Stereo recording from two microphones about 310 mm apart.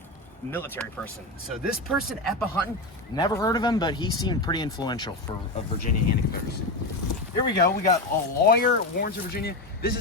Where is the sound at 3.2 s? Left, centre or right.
Centre.